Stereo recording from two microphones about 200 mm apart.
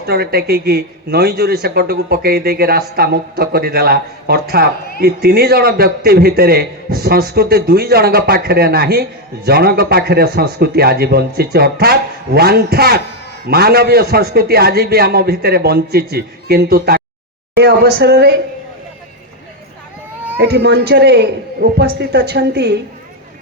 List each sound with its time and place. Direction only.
0.0 s a man's voice: 50° right (ahead or behind)
20.4 s a man's voice: 55° right (ahead or behind)